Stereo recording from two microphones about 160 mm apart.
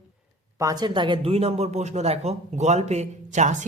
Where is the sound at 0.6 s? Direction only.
25° right (ahead or behind).